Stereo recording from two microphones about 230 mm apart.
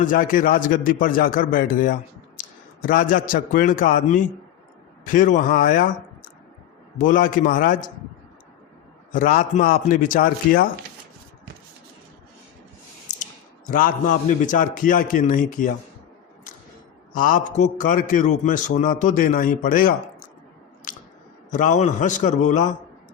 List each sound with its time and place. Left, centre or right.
0.0 s a man's voice: left
7.0 s a man's voice: left
9.1 s a man's voice: left
13.1 s a sound: left
13.7 s a man's voice: left
17.2 s a man's voice: left
20.9 s chewing: left
21.5 s a man's voice: left